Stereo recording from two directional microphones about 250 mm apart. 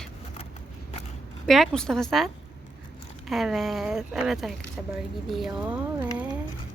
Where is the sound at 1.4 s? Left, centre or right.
Centre.